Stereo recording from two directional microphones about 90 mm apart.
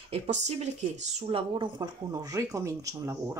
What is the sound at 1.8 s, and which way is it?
Speech, 40° right (ahead or behind).